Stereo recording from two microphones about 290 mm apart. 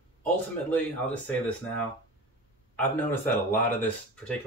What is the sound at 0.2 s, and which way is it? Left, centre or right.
Speech, centre.